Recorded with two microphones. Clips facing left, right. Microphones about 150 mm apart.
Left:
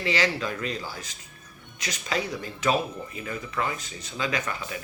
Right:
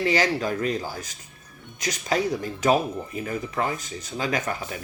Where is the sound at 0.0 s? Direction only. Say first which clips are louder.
Right 4 dB; 45° right (ahead or behind).